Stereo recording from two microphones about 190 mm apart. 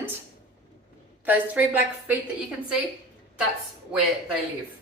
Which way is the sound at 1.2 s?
10° right (ahead or behind).